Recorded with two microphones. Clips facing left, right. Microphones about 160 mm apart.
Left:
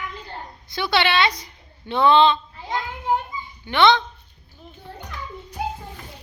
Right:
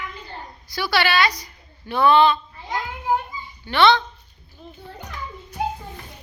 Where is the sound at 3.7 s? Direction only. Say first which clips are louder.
Even; 20° left (ahead or behind).